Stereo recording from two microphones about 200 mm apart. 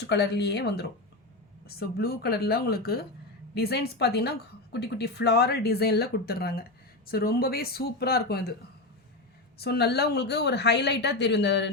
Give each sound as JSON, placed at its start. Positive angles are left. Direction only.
{"t": 0.1, "sound": "a woman's voice", "side_deg": 55}
{"t": 9.6, "sound": "a woman's voice", "side_deg": 55}